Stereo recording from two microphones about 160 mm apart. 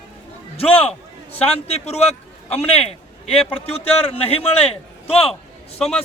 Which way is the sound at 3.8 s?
40° left (ahead or behind).